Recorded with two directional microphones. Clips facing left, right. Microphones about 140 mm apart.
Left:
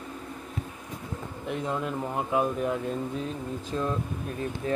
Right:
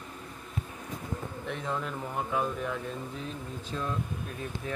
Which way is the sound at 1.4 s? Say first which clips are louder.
Left 5 dB; 15° left (ahead or behind).